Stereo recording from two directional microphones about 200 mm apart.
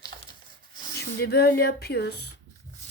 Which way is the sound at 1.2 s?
50° left (ahead or behind).